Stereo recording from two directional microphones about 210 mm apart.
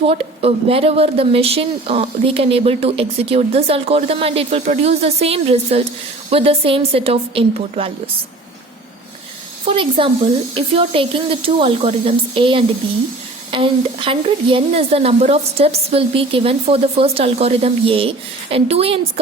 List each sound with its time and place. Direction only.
0.1 s speech: 25° right (ahead or behind)
9.6 s speech: 25° right (ahead or behind)